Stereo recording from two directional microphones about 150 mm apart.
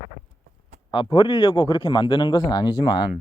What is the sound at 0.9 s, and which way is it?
A man's voice, 30° left (ahead or behind).